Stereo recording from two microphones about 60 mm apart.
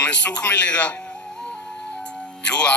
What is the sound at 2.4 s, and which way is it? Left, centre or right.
Speech, centre.